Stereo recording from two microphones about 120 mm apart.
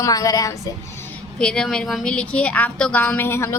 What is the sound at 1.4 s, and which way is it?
A woman's voice, 5° left (ahead or behind).